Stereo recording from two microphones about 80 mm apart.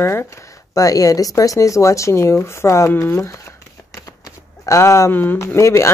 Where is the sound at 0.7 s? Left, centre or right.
Left.